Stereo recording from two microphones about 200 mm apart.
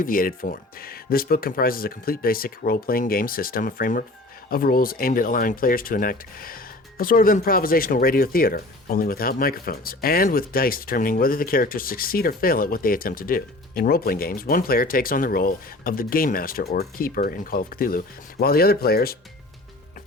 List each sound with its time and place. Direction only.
0.0 s speech: 45° left (ahead or behind)